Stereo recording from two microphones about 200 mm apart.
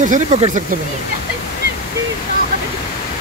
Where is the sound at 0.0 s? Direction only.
35° right (ahead or behind).